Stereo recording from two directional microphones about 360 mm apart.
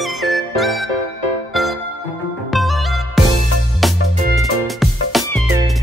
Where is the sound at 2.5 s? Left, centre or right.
Centre.